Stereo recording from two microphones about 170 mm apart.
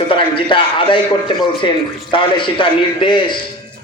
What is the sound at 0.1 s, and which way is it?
Speech, 30° left (ahead or behind).